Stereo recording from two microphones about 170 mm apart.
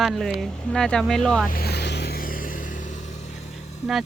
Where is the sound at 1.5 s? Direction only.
65° left (ahead or behind); by 3.8 s 40° left (ahead or behind).